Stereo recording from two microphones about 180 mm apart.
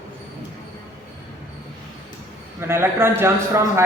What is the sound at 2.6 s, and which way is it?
A man's voice, 15° right (ahead or behind).